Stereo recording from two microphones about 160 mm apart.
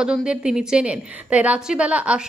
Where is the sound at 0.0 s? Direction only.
5° right (ahead or behind).